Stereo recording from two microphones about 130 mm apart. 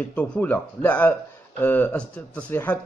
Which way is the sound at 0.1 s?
10° left (ahead or behind).